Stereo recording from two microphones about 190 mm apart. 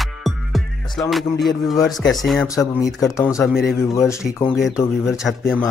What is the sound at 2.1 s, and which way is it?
Speech, centre (ahead or behind).